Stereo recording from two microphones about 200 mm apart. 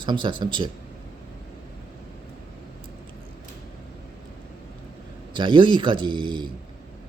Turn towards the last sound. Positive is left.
turn(degrees=-25)  # may be behind; listen again after turning